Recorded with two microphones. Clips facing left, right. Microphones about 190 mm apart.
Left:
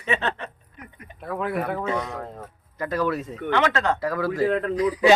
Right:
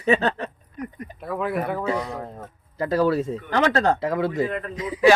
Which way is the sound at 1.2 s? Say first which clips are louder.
Right 1 dB; centre (ahead or behind).